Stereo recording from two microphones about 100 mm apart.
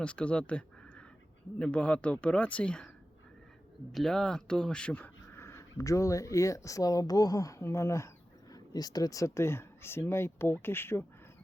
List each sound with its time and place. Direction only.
0.0 s speech: 10° left (ahead or behind)
3.9 s speech: 5° left (ahead or behind)
5.5 s speech: 30° left (ahead or behind)
8.5 s speech: 40° left (ahead or behind); by 11.0 s 25° left (ahead or behind)